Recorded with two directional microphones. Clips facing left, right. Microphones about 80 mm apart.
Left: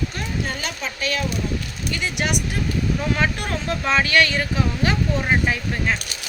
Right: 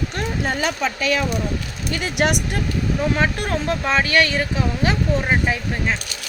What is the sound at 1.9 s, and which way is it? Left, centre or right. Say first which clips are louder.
Speech: right 5 dB; right.